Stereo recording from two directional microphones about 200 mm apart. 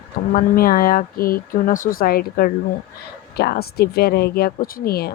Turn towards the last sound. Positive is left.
turn(degrees=50)  # may be behind; listen again after turning